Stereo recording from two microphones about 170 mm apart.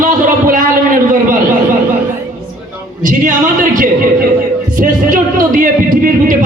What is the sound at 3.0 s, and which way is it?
Speech, 50° right (ahead or behind).